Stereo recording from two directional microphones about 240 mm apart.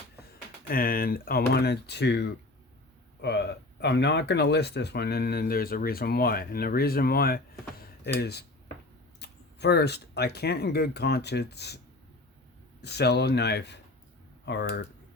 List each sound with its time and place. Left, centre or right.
0.7 s speech: left
7.8 s a sound: left
9.1 s speech: left
12.8 s speech: left